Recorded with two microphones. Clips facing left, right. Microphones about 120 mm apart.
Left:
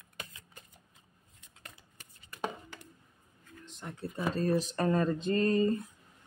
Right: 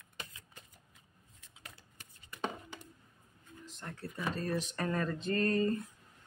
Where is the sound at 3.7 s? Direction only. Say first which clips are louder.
Left 2 dB; centre (ahead or behind).